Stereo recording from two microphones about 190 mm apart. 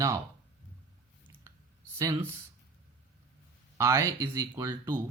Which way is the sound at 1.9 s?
15° right (ahead or behind).